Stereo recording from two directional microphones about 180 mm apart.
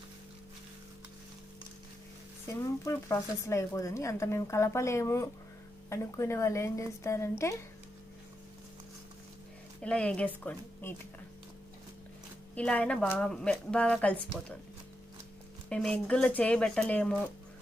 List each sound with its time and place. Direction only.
2.4 s speech: 15° left (ahead or behind)
9.8 s speech: 5° left (ahead or behind)
12.5 s speech: 5° left (ahead or behind)
15.7 s speech: 5° left (ahead or behind)